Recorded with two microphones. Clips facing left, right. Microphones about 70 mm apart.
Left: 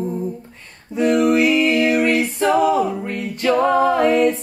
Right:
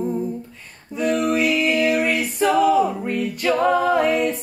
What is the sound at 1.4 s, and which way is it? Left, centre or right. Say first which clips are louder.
Music: left 3 dB; left.